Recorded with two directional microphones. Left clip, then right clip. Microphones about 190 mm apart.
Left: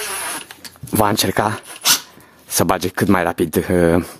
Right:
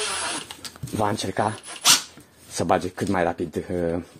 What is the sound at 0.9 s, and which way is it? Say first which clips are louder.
Speech: left 8 dB; 50° left (ahead or behind).